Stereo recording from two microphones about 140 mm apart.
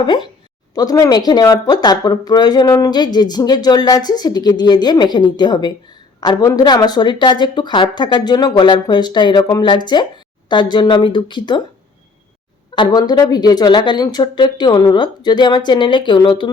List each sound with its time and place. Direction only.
0.7 s a woman's voice: 25° left (ahead or behind)
12.7 s a woman's voice: 30° left (ahead or behind)